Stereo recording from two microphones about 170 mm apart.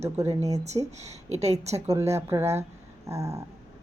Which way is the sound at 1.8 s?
15° right (ahead or behind).